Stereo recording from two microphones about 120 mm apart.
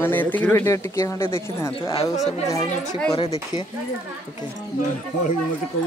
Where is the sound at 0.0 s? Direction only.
15° left (ahead or behind).